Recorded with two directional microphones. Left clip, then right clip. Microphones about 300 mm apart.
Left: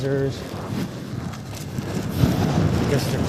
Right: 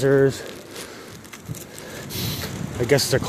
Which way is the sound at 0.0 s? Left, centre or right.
Right.